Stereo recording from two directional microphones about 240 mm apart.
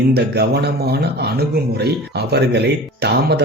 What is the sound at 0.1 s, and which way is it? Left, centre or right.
Speech, right.